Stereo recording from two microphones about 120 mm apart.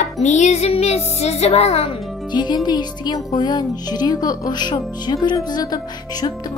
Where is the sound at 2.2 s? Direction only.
40° left (ahead or behind).